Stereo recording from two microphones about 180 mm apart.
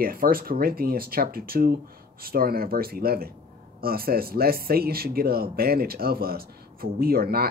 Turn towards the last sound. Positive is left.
turn(degrees=-60)  # may be behind; listen again after turning